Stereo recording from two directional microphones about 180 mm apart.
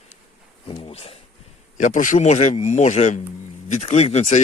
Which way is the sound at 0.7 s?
30° left (ahead or behind).